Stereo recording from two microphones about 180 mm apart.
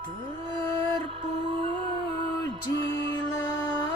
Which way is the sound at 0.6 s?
30° right (ahead or behind).